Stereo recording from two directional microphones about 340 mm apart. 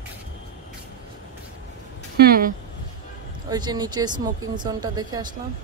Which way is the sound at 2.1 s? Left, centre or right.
Right.